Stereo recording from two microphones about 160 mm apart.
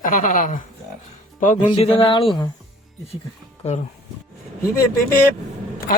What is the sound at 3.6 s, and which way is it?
Speech, 40° left (ahead or behind).